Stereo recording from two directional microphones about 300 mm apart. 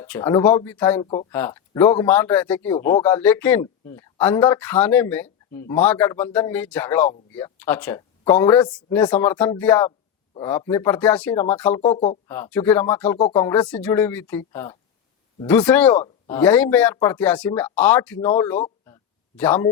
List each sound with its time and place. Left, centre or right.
0.0 s speech: centre
1.0 s speech: centre
1.3 s speech: centre